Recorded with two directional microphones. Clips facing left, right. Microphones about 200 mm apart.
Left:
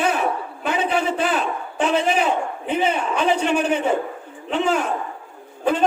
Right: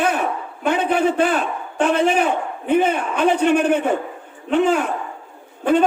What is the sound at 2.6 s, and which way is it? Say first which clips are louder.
A man's voice: right 5 dB; 55° right (ahead or behind).